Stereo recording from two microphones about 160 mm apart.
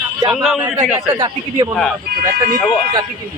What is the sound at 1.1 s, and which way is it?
Speech, 30° right (ahead or behind).